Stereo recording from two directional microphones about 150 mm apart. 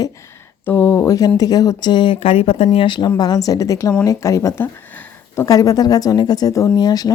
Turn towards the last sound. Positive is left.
turn(degrees=25)  # may be behind; listen again after turning